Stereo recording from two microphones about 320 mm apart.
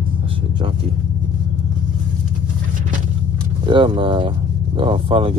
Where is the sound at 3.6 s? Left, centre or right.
Centre.